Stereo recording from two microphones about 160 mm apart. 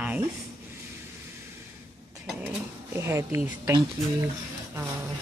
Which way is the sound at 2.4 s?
15° right (ahead or behind).